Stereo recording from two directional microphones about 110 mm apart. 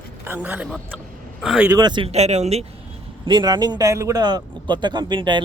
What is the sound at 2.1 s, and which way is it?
Speech, 85° right.